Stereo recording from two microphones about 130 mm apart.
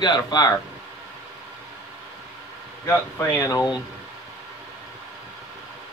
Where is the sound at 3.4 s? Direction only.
25° left (ahead or behind).